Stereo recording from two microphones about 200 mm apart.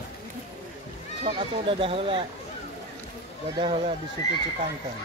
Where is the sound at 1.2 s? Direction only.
25° right (ahead or behind).